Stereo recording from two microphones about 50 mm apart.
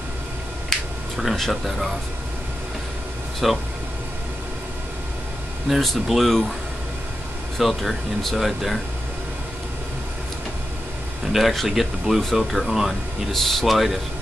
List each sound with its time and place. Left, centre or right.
1.1 s speech: centre
3.4 s speech: centre
5.7 s speech: centre
7.5 s speech: centre
11.3 s speech: centre